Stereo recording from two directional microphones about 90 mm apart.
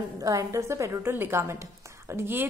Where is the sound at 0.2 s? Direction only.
40° right (ahead or behind).